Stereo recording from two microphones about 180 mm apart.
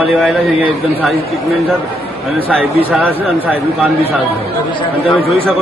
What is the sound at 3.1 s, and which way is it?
Speech, 10° right (ahead or behind).